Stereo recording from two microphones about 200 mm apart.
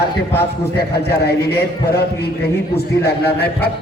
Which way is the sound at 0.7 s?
55° left (ahead or behind).